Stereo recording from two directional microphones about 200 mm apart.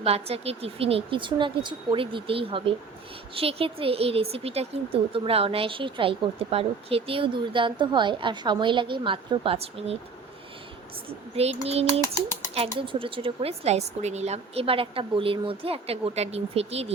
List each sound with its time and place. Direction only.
0.0 s speech: 30° right (ahead or behind)
11.3 s a sound: 30° right (ahead or behind)
12.0 s speech: 15° left (ahead or behind)
12.5 s speech: 25° right (ahead or behind)